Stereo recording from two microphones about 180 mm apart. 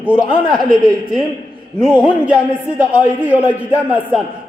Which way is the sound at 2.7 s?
10° right (ahead or behind).